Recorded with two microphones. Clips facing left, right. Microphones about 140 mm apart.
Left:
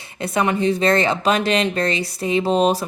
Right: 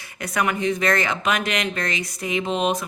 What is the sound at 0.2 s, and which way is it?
Speech, 25° left (ahead or behind).